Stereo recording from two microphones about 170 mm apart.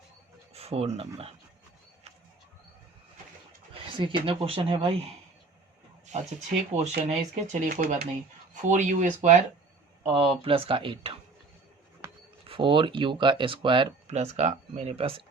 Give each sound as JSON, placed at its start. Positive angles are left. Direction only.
{"t": 0.5, "sound": "speech", "side_deg": -35}
{"t": 3.8, "sound": "speech", "side_deg": -30}
{"t": 6.1, "sound": "speech", "side_deg": -40}
{"t": 10.1, "sound": "speech", "side_deg": -35}
{"t": 12.5, "sound": "speech", "side_deg": -30}